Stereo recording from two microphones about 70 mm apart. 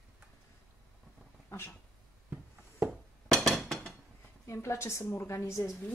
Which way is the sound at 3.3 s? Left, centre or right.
Centre.